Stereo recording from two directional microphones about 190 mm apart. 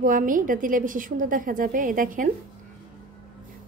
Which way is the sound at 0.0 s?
45° right (ahead or behind).